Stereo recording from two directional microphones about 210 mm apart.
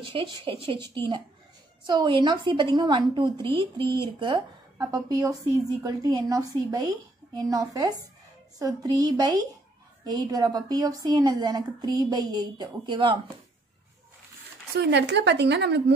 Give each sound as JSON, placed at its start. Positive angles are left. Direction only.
{"t": 0.0, "sound": "a woman's voice", "side_deg": -25}
{"t": 14.8, "sound": "a woman's voice", "side_deg": -55}